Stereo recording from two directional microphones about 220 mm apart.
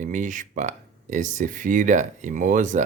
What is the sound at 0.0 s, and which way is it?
Speech, 35° right (ahead or behind).